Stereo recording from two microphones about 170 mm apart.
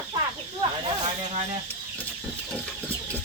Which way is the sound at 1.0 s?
40° right (ahead or behind).